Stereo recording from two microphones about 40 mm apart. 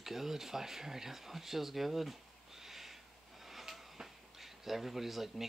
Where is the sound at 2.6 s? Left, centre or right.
Centre.